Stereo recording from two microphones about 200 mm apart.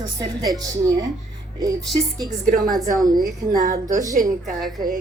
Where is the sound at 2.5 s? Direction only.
45° right (ahead or behind).